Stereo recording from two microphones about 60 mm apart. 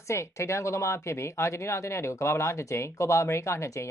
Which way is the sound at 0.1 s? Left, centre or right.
Left.